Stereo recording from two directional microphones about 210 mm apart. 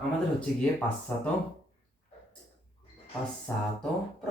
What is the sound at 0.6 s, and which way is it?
Speech, 5° left (ahead or behind).